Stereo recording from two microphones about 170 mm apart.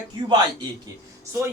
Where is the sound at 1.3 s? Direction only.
15° right (ahead or behind).